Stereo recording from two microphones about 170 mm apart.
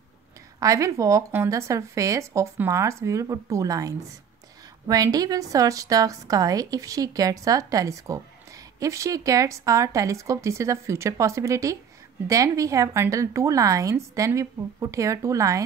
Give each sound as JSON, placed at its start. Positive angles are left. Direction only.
{"t": 0.6, "sound": "speech", "side_deg": -20}